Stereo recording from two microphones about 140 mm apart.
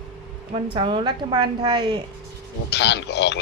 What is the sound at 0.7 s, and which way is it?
A woman's voice, 35° right (ahead or behind).